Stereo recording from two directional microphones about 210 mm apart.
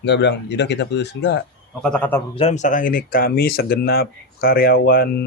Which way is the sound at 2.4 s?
30° left (ahead or behind).